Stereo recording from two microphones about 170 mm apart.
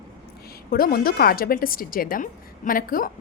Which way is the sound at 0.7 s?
60° left (ahead or behind).